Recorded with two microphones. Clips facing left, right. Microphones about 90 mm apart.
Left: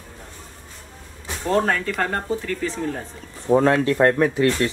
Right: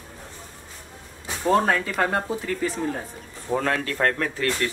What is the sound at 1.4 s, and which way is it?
Speech, 5° right (ahead or behind).